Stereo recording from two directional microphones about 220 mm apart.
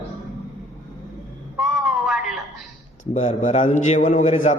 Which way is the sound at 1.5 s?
Centre (ahead or behind).